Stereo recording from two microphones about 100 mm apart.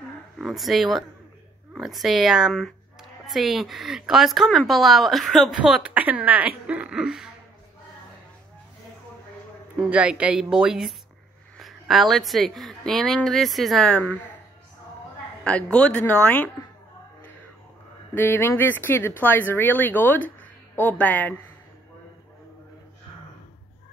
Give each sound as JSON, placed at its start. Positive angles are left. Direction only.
{"t": 0.4, "sound": "speech", "side_deg": 0}
{"t": 9.8, "sound": "speech", "side_deg": -10}
{"t": 13.9, "sound": "speech", "side_deg": 15}
{"t": 15.4, "sound": "speech", "side_deg": 10}
{"t": 18.1, "sound": "speech", "side_deg": 20}